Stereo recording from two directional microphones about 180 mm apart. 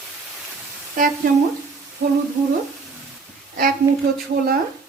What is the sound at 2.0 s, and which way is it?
Humming, 65° right (ahead or behind).